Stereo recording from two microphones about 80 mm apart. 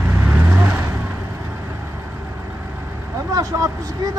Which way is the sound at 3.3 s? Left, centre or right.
Right.